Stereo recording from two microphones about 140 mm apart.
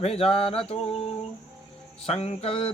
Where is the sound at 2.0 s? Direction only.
45° left (ahead or behind).